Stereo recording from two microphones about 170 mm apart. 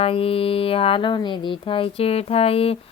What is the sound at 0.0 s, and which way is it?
Speech, 35° left (ahead or behind).